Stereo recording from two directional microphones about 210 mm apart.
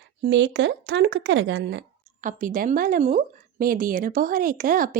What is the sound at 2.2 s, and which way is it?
A woman's voice, 40° right (ahead or behind).